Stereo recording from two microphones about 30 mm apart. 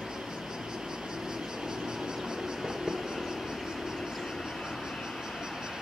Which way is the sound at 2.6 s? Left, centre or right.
Right.